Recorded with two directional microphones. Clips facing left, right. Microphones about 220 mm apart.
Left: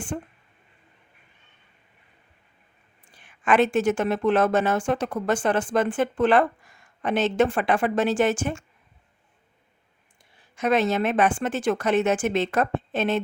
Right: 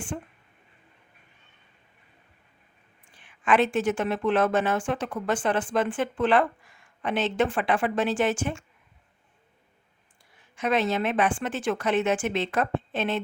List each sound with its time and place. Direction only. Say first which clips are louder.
0.1 s speech: left 4 dB; 45° left (ahead or behind)
3.1 s speech: left 2 dB; 40° left (ahead or behind)
10.3 s speech: left 3 dB; 40° left (ahead or behind)